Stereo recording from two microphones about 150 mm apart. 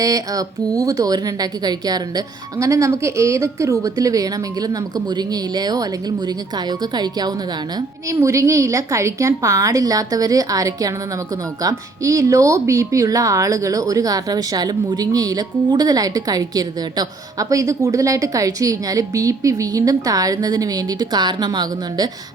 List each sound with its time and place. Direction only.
0.0 s speech: 25° right (ahead or behind)